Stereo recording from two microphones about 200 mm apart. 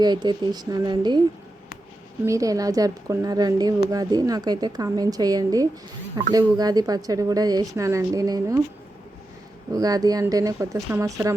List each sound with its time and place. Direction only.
0.0 s a woman's voice: 20° right (ahead or behind)
2.2 s a woman's voice: 15° right (ahead or behind)
9.7 s speech: 20° right (ahead or behind)